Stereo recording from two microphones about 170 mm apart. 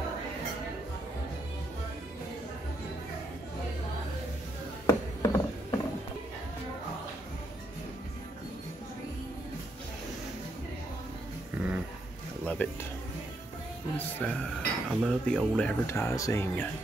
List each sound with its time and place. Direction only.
4.8 s a sound: 20° left (ahead or behind)
12.6 s music: 10° left (ahead or behind)
13.9 s speech: 5° left (ahead or behind)